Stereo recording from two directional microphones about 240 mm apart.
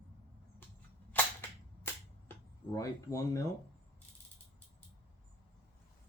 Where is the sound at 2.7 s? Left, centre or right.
Centre.